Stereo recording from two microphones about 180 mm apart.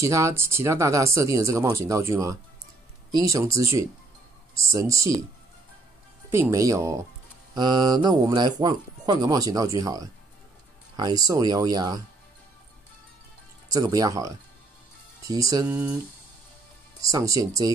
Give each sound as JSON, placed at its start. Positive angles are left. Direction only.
{"t": 0.0, "sound": "speech", "side_deg": -15}
{"t": 6.5, "sound": "speech", "side_deg": -20}
{"t": 13.7, "sound": "speech", "side_deg": -20}
{"t": 17.0, "sound": "speech", "side_deg": -20}